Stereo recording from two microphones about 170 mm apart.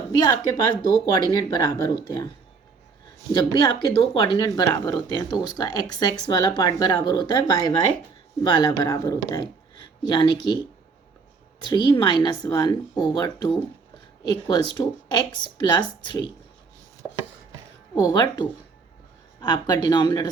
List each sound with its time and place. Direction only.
0.2 s speech: 25° left (ahead or behind)
3.3 s speech: 30° left (ahead or behind)
11.6 s speech: 25° left (ahead or behind)
17.0 s chopping: 15° right (ahead or behind)
17.9 s speech: 25° left (ahead or behind)